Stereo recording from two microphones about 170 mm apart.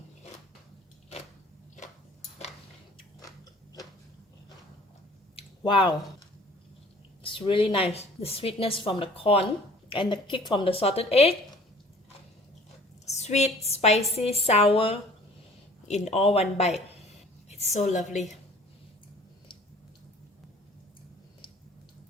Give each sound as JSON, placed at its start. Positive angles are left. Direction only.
{"t": 5.4, "sound": "a sound", "side_deg": 30}
{"t": 7.2, "sound": "a woman's voice", "side_deg": 30}
{"t": 13.1, "sound": "a woman's voice", "side_deg": 40}